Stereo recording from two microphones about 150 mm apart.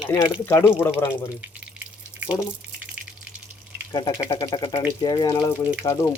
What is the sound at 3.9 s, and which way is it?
Speech, 30° left (ahead or behind).